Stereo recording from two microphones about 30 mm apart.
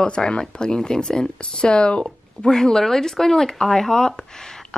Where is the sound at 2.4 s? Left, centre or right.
Left.